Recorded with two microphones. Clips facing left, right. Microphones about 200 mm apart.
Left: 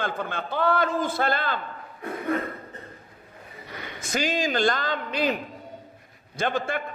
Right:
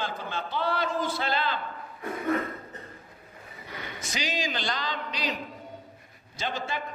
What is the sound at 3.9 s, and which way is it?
A man's voice, 50° left (ahead or behind).